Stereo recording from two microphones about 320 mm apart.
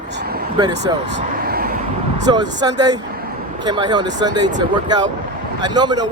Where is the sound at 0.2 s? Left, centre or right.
Right.